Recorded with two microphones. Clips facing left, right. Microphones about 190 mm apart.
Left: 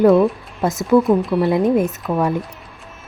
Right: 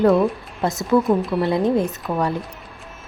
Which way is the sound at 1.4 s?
20° left (ahead or behind).